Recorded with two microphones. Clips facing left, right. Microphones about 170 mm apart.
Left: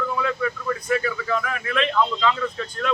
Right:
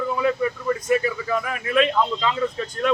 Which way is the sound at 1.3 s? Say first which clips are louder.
Right 4 dB; 10° right (ahead or behind).